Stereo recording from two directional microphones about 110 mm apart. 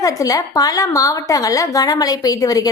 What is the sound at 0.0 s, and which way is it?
A woman's voice, 35° left (ahead or behind).